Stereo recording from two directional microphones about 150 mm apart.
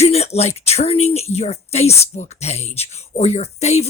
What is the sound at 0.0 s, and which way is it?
Speech, 45° left (ahead or behind).